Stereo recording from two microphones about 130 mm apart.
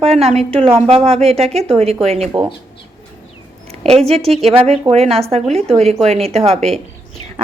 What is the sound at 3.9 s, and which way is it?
Speech, 50° right (ahead or behind).